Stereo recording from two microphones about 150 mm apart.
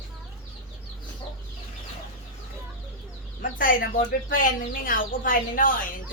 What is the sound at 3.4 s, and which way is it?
Speech, 65° left (ahead or behind).